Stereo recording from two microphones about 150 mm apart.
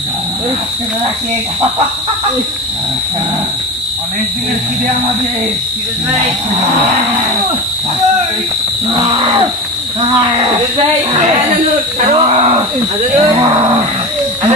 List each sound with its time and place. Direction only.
12.0 s speech: 45° right (ahead or behind)
13.2 s speech: 30° right (ahead or behind)